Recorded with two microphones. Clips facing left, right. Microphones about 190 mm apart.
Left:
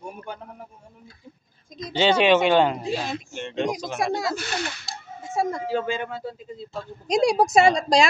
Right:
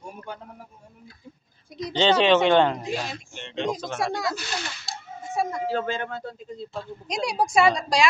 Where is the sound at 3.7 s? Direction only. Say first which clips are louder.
Left 2 dB; 15° left (ahead or behind).